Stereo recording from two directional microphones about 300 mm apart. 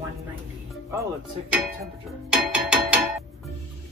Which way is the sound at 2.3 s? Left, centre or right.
Centre.